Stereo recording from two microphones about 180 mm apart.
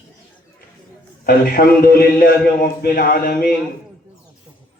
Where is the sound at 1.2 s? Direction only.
55° left (ahead or behind).